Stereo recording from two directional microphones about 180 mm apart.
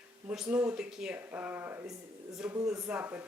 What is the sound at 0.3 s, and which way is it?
Speech, 5° right (ahead or behind).